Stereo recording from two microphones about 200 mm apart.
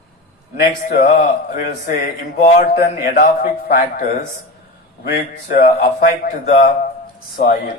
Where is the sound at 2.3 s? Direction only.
50° left (ahead or behind).